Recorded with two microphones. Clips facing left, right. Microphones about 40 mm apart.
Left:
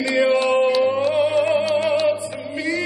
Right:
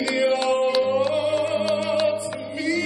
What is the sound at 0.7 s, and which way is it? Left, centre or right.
Music, centre.